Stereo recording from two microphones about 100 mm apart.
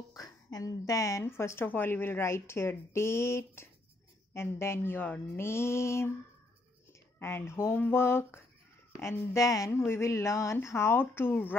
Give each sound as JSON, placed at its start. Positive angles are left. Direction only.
{"t": 0.1, "sound": "a woman's voice", "side_deg": 40}